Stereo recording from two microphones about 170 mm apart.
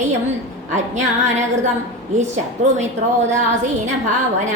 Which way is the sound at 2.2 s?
45° right (ahead or behind).